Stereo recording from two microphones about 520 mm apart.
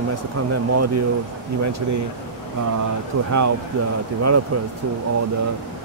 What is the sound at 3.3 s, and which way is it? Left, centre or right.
Speech, right.